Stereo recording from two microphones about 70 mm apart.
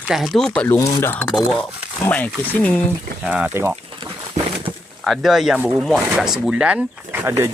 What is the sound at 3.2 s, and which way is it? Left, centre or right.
Speech, centre.